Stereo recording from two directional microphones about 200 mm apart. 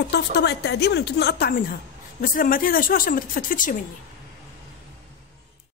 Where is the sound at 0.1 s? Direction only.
60° left (ahead or behind); by 3.7 s 45° left (ahead or behind).